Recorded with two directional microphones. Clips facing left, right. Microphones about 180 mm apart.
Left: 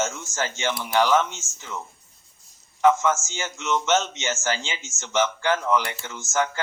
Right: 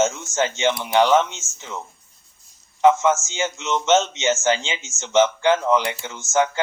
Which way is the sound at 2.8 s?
25° right (ahead or behind).